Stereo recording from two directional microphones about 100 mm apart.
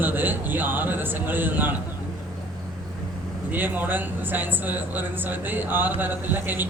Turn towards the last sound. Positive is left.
turn(degrees=-20)  # may be behind; listen again after turning